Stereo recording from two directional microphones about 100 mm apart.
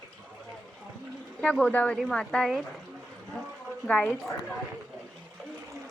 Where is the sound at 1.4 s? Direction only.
10° left (ahead or behind).